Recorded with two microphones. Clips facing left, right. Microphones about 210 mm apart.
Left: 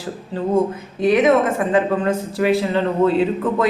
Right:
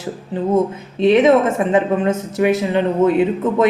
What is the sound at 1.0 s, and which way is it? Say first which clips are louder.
Speech: right 3 dB; 25° right (ahead or behind).